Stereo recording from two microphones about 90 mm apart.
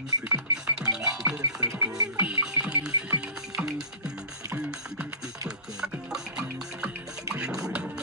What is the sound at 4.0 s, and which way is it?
Music, 40° right (ahead or behind).